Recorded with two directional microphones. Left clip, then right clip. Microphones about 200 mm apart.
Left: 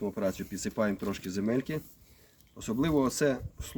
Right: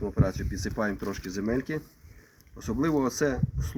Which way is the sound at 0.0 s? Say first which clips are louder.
Right 1 dB; 5° left (ahead or behind).